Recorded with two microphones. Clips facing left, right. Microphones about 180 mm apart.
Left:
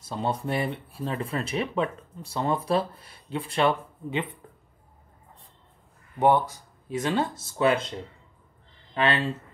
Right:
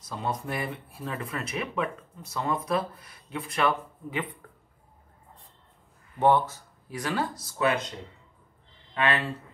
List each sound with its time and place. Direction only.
0.0 s speech: 30° left (ahead or behind)
6.1 s speech: 15° left (ahead or behind); by 7.9 s 30° left (ahead or behind)
8.9 s speech: 30° left (ahead or behind)